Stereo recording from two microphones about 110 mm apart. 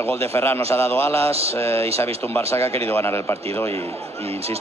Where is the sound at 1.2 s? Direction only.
65° right (ahead or behind).